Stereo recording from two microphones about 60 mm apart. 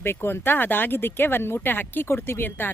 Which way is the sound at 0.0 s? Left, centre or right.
Left.